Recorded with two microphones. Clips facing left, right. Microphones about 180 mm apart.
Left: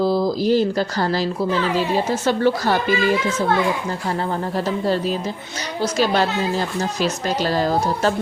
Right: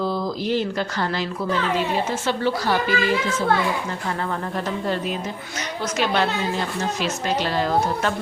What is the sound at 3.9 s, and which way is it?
A woman's voice, 30° left (ahead or behind).